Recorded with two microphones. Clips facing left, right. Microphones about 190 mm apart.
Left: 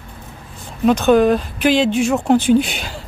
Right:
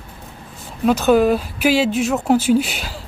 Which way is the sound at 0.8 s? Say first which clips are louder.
Left 2 dB; 5° right (ahead or behind).